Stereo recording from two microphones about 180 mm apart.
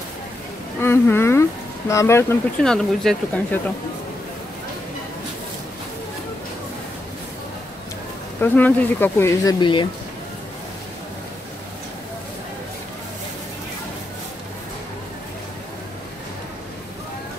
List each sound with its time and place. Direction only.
0.7 s speech: 15° left (ahead or behind)
2.6 s speech: 5° left (ahead or behind)
8.4 s speech: 10° left (ahead or behind); by 9.8 s 25° left (ahead or behind)